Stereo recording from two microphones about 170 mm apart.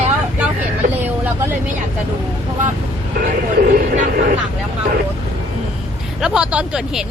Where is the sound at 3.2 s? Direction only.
50° right (ahead or behind).